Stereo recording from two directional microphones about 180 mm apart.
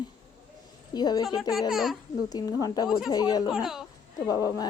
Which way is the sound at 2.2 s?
20° left (ahead or behind).